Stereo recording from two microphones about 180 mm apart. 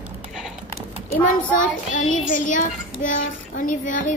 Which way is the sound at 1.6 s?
45° left (ahead or behind).